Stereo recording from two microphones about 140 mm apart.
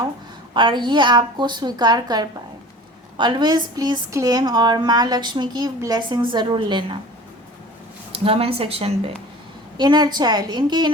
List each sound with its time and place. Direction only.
0.5 s speech: 35° right (ahead or behind)
8.1 s speech: 40° right (ahead or behind)
9.7 s speech: 30° right (ahead or behind)